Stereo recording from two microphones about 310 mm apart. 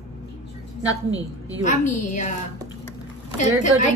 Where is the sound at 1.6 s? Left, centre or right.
Left.